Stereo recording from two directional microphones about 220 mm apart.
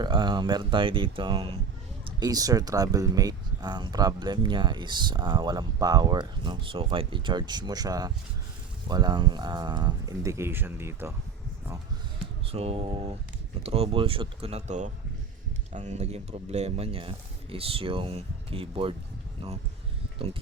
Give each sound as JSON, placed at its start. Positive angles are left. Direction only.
{"t": 0.0, "sound": "speech", "side_deg": -20}
{"t": 12.5, "sound": "speech", "side_deg": -25}